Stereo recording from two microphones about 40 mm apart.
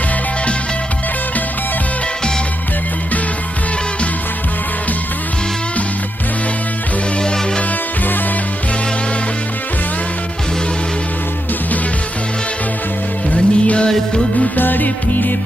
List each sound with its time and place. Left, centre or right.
7.2 s music: left
13.3 s music: left
14.5 s music: left